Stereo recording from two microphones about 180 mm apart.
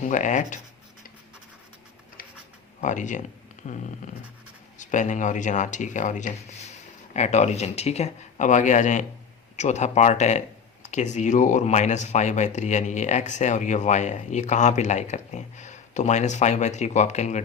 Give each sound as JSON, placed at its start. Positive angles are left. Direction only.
{"t": 0.0, "sound": "speech", "side_deg": 45}
{"t": 2.8, "sound": "speech", "side_deg": 45}